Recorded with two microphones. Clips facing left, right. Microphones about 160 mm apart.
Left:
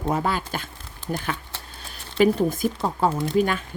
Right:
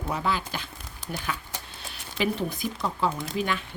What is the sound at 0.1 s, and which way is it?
A woman's voice, 45° left (ahead or behind).